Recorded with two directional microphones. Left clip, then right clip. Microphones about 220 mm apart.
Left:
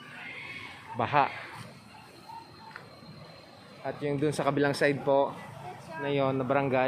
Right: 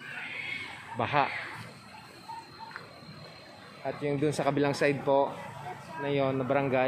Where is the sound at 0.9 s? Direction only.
5° left (ahead or behind).